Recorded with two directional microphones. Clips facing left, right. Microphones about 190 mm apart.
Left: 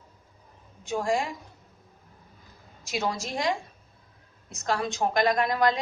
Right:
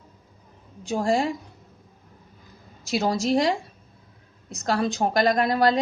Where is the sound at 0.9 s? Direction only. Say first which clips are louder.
Right 4 dB; 35° right (ahead or behind).